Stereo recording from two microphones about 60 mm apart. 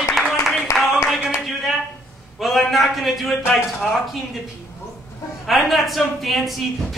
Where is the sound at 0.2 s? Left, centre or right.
Centre.